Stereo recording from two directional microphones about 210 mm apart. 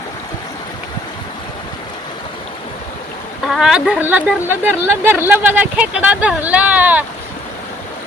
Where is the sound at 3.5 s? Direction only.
Centre (ahead or behind).